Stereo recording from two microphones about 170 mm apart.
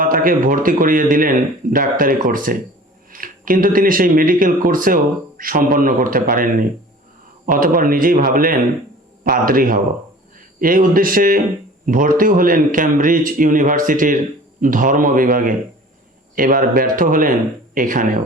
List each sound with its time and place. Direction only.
0.0 s speech: 55° right (ahead or behind)